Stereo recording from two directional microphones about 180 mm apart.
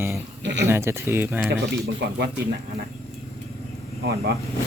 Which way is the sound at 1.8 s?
65° right (ahead or behind).